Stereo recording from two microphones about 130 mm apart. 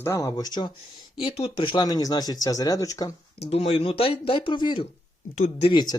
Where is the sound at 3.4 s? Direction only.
55° left (ahead or behind).